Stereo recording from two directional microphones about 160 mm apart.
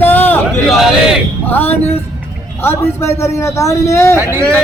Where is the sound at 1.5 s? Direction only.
10° left (ahead or behind).